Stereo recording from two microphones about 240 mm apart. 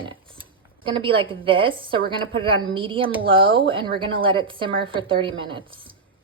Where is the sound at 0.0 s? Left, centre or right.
Right.